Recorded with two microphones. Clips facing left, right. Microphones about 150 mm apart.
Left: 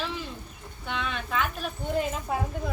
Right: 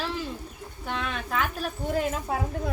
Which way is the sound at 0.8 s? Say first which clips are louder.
Right 1 dB; 40° right (ahead or behind).